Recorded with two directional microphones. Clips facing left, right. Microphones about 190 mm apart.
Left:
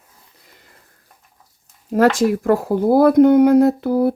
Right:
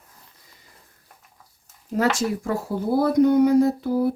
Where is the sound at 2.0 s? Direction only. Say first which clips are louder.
Left 7 dB; 90° left.